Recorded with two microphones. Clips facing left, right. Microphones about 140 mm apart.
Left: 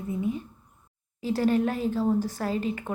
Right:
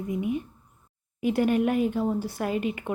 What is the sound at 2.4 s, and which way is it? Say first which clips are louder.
Speech: right 1 dB; 35° left (ahead or behind).